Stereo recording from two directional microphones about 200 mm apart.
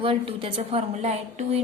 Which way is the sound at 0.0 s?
25° right (ahead or behind).